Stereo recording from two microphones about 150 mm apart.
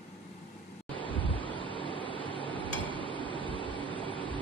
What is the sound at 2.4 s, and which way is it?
Tick-tock, 35° right (ahead or behind).